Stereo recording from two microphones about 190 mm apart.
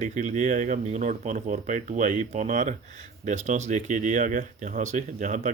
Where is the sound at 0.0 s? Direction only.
40° right (ahead or behind).